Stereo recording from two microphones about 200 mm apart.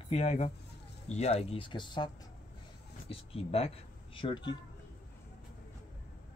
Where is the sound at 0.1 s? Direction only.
35° left (ahead or behind).